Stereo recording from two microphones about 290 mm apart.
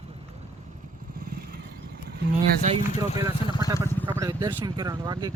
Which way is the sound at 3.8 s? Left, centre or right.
Centre.